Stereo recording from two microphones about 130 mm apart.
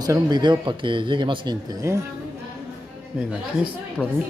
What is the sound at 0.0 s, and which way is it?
Speech, 30° right (ahead or behind).